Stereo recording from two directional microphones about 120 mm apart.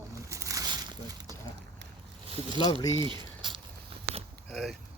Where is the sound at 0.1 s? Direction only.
25° right (ahead or behind).